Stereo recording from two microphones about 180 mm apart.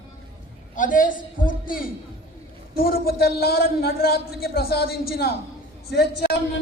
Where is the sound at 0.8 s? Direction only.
45° left (ahead or behind).